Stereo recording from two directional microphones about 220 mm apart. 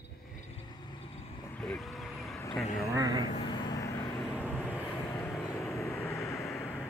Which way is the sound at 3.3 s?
20° left (ahead or behind).